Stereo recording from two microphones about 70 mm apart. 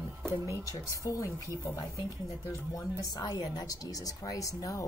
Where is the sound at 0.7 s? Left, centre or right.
Left.